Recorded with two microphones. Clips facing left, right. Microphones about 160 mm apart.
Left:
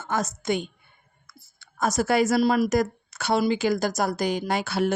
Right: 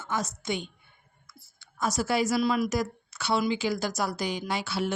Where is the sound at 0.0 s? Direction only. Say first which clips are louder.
Left 4 dB; 45° left (ahead or behind).